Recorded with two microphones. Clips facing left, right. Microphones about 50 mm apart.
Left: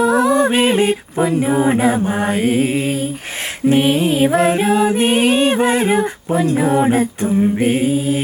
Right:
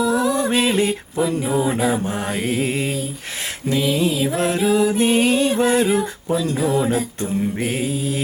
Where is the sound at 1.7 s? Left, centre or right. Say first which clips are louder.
Left 5 dB; left.